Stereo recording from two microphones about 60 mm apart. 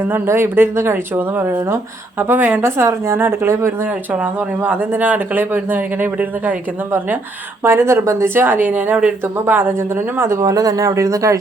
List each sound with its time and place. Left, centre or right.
0.3 s speech: right
2.6 s speech: right
3.8 s speech: right
7.6 s speech: right
10.4 s speech: right